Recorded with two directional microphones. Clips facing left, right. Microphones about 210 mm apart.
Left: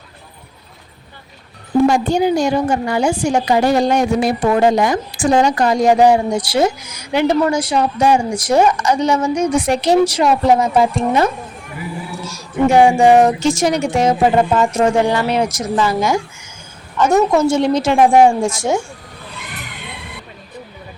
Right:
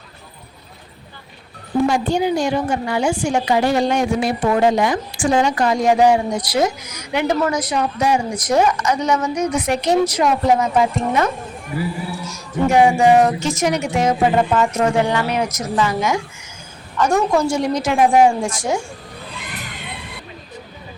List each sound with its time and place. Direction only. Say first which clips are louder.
1.9 s a woman's voice: left 3 dB; 45° left (ahead or behind)
12.7 s speech: left 2 dB; 30° left (ahead or behind)
17.0 s speech: left 4 dB; 20° left (ahead or behind)